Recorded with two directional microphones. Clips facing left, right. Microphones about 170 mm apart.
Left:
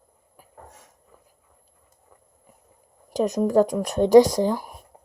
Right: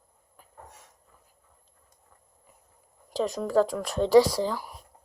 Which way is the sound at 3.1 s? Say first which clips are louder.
Left 5 dB; 20° left (ahead or behind).